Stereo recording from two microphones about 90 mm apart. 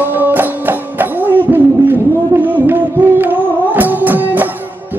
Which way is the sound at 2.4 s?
20° right (ahead or behind).